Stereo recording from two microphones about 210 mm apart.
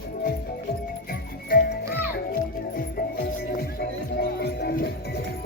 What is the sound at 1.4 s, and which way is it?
Music, 45° left (ahead or behind).